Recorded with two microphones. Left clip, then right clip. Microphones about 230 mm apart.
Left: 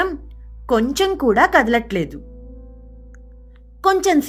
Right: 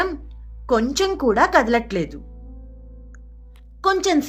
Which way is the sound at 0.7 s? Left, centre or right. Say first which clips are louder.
Left 2 dB; left.